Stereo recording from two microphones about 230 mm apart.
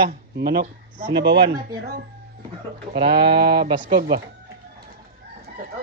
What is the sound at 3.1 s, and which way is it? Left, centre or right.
A man's voice, right.